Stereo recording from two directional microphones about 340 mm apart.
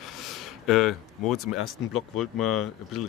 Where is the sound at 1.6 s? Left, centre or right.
Left.